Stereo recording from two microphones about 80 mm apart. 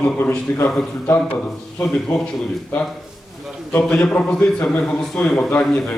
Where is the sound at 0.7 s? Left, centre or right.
Centre.